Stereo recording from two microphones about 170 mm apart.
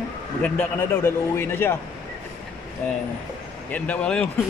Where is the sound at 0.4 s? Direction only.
10° left (ahead or behind).